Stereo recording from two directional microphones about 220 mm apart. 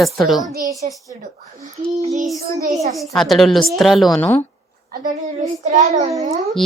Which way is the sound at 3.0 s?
Centre (ahead or behind).